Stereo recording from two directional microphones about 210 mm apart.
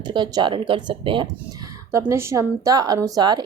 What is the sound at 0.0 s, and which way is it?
Speech, 20° right (ahead or behind).